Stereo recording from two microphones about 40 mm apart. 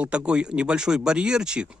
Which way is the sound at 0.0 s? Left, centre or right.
Right.